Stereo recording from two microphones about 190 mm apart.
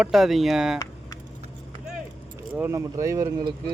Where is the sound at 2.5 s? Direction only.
15° right (ahead or behind).